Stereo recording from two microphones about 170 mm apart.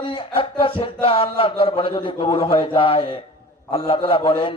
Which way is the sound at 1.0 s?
30° left (ahead or behind).